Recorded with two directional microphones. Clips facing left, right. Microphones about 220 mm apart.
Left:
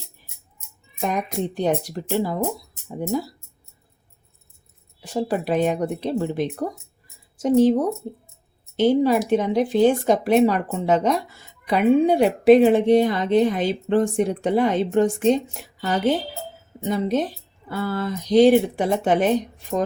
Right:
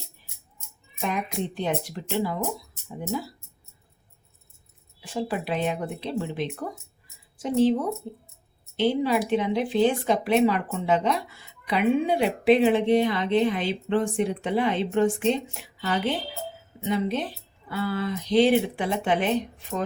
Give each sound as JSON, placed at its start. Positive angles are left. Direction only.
{"t": 1.0, "sound": "speech", "side_deg": 40}
{"t": 4.9, "sound": "speech", "side_deg": 40}